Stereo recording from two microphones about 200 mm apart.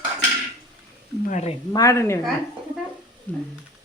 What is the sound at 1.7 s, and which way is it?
Speech, 15° left (ahead or behind).